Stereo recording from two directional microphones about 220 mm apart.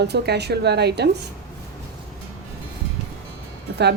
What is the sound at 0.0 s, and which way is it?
Speech, 50° right (ahead or behind).